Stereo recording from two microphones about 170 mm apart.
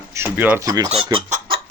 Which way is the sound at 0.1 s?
15° right (ahead or behind).